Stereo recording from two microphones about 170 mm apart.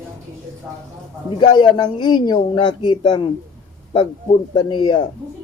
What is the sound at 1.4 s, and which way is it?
Speech, 25° left (ahead or behind).